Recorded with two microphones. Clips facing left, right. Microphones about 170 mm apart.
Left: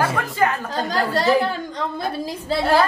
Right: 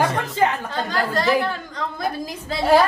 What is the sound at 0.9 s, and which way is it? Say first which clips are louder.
Speech: left 2 dB; 35° left (ahead or behind).